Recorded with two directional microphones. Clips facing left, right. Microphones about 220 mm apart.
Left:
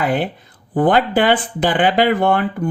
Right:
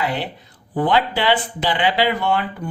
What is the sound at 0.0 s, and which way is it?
Speech, 50° left (ahead or behind).